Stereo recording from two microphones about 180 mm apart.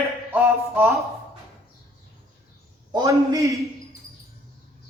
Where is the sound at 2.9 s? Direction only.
20° right (ahead or behind).